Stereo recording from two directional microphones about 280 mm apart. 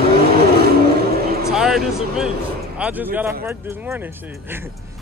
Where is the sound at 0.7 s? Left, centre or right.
Right.